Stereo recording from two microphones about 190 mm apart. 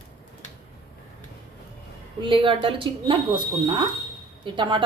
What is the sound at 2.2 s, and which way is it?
Speech, 25° right (ahead or behind).